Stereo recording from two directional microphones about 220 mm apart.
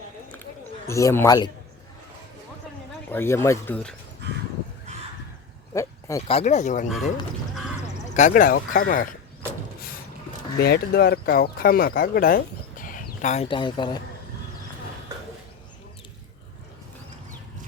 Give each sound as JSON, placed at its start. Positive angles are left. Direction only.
{"t": 0.9, "sound": "speech", "side_deg": 15}
{"t": 3.1, "sound": "speech", "side_deg": 10}
{"t": 4.2, "sound": "a sound", "side_deg": -50}
{"t": 5.7, "sound": "a sound", "side_deg": 15}
{"t": 6.3, "sound": "speech", "side_deg": 30}
{"t": 8.1, "sound": "speech", "side_deg": 35}
{"t": 10.6, "sound": "speech", "side_deg": 45}